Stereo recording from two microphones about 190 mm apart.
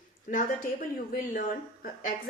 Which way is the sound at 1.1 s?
45° left (ahead or behind).